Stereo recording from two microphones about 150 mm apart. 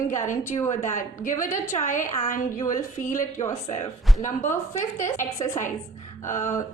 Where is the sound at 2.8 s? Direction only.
20° left (ahead or behind).